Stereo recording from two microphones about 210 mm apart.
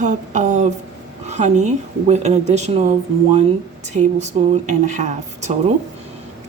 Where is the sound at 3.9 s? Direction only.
35° right (ahead or behind).